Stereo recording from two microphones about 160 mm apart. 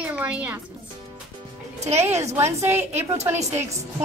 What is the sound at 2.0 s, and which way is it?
A woman's voice, 15° right (ahead or behind).